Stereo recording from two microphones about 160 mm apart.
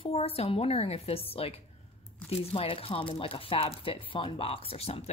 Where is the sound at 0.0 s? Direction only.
40° left (ahead or behind).